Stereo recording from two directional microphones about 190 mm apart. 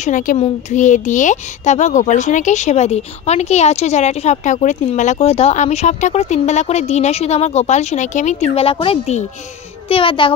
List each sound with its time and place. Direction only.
0.0 s a child's voice: 40° left (ahead or behind)